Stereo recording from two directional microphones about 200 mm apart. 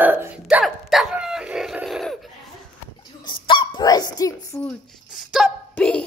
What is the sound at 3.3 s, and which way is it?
Dog, 25° left (ahead or behind).